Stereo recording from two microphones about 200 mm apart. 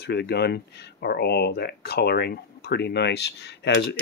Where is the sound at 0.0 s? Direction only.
55° left (ahead or behind).